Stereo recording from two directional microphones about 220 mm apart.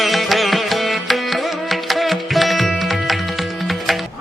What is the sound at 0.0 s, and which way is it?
Music, centre (ahead or behind).